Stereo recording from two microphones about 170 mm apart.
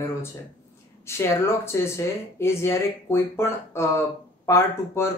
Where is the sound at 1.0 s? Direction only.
15° left (ahead or behind).